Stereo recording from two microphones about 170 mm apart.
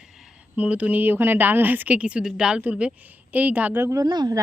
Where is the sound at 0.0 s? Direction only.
5° right (ahead or behind).